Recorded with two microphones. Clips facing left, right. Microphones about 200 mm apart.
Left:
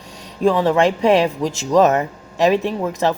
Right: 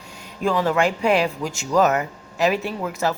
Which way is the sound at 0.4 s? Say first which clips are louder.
Left 5 dB; 30° left (ahead or behind).